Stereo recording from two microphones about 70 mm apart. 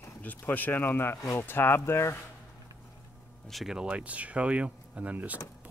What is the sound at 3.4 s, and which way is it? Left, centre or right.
Speech, centre.